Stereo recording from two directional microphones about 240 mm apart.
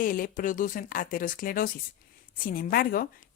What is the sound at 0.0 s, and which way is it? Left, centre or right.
A woman's voice, left.